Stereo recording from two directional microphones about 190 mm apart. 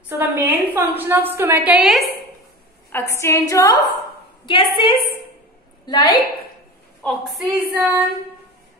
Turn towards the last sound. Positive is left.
turn(degrees=-10)  # may be behind; listen again after turning